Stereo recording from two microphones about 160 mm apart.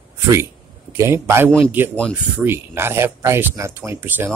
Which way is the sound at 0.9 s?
15° right (ahead or behind).